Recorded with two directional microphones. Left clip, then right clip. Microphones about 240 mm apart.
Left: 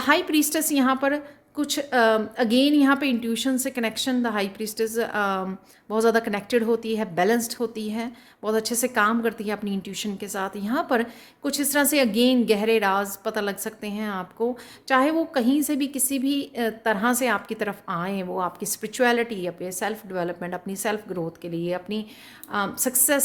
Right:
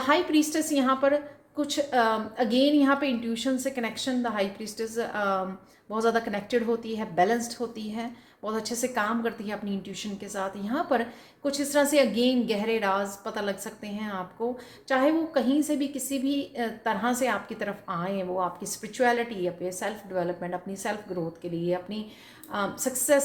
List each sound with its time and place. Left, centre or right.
0.0 s a woman's voice: left